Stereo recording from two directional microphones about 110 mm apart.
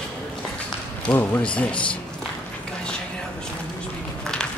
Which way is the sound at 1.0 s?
15° left (ahead or behind).